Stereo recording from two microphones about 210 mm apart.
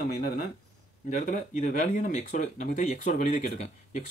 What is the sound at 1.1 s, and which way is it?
Speech, 35° left (ahead or behind).